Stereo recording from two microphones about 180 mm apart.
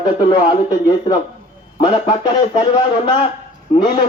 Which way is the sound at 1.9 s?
30° left (ahead or behind).